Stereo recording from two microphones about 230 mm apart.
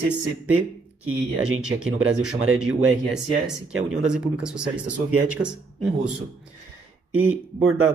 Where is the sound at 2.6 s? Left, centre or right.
Centre.